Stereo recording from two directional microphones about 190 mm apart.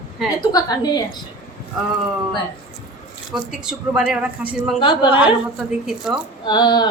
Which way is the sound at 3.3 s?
5° right (ahead or behind).